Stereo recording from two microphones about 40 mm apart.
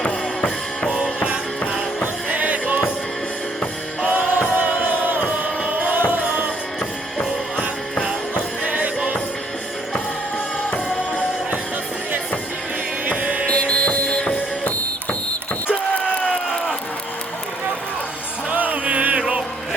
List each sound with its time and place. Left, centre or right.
2.3 s music: right
4.1 s music: right
8.6 s music: right
13.1 s music: right
13.5 s music: left
18.5 s music: right